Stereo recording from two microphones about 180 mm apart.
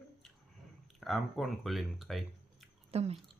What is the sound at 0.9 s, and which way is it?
Speech, centre (ahead or behind).